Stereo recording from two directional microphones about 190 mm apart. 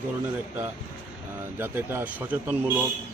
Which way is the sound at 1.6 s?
10° right (ahead or behind).